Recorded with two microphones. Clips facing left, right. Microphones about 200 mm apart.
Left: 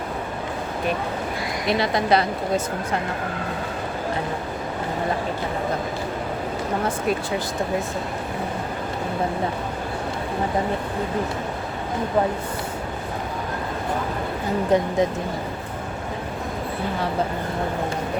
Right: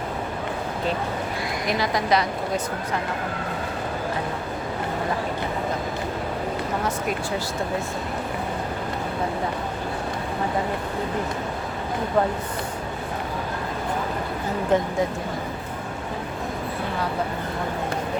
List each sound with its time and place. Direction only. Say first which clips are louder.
1.8 s speech: left 2 dB; 30° left (ahead or behind)
14.7 s speech: left 1 dB; 15° left (ahead or behind)